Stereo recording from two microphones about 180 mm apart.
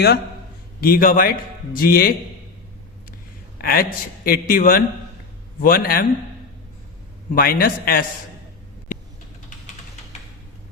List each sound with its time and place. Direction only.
0.8 s a man's voice: 55° left (ahead or behind)
3.6 s a man's voice: 55° left (ahead or behind)
7.3 s a man's voice: 55° left (ahead or behind)